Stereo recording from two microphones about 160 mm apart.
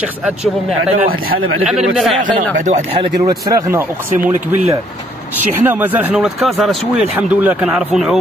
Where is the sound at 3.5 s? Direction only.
20° right (ahead or behind).